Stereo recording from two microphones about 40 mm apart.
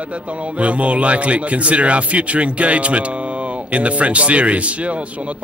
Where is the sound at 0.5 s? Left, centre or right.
Right.